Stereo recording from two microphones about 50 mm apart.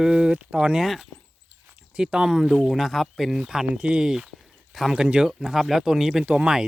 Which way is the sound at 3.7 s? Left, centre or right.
Right.